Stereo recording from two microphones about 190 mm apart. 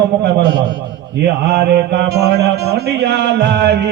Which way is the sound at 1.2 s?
60° right (ahead or behind).